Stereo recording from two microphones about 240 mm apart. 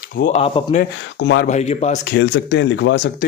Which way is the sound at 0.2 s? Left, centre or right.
Left.